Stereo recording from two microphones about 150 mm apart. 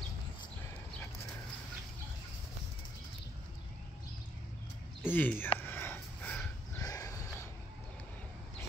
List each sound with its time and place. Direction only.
5.0 s speech: 10° left (ahead or behind)
5.6 s sniff: 15° left (ahead or behind)
6.8 s a sound: 25° left (ahead or behind)